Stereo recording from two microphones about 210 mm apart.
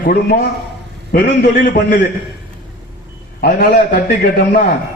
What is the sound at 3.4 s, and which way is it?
Speech, 40° left (ahead or behind).